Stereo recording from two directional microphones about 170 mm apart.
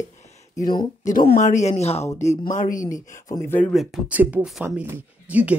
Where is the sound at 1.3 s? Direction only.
45° left (ahead or behind).